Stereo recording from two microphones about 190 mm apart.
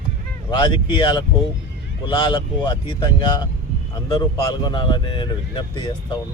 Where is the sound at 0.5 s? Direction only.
25° left (ahead or behind).